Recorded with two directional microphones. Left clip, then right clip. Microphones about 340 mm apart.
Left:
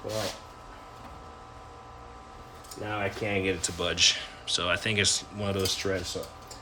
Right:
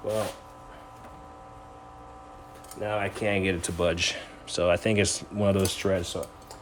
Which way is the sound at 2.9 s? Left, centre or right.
Right.